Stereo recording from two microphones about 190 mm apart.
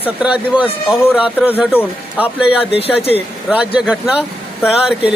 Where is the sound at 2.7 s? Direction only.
30° left (ahead or behind).